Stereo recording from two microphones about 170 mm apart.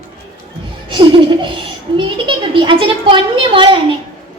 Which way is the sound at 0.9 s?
30° right (ahead or behind).